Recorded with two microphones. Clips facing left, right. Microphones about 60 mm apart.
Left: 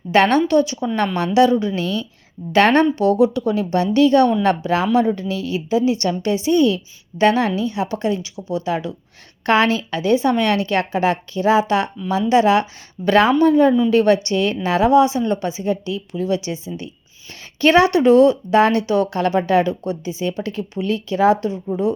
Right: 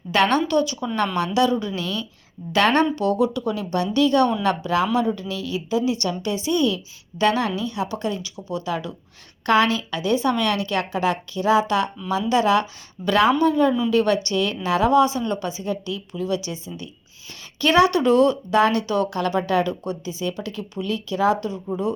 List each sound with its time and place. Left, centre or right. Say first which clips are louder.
0.1 s speech: left 4 dB; left